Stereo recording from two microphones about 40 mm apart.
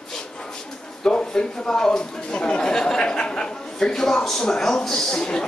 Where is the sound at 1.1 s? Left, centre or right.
Left.